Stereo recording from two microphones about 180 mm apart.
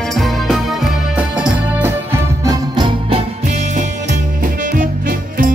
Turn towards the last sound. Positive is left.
turn(degrees=-50)  # may be behind; listen again after turning